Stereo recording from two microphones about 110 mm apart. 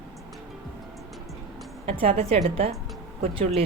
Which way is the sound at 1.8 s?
65° right (ahead or behind).